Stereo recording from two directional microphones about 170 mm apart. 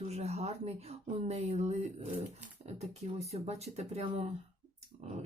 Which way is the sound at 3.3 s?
40° right (ahead or behind).